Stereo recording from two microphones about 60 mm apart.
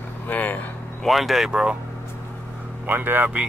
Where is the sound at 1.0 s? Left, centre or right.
Centre.